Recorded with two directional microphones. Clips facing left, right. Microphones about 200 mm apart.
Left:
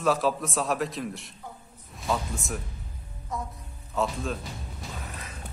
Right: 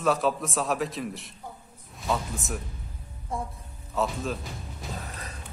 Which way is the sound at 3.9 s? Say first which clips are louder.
Even; centre (ahead or behind).